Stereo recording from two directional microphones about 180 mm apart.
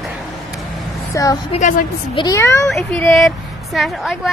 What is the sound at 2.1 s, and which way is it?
Speech, 25° left (ahead or behind).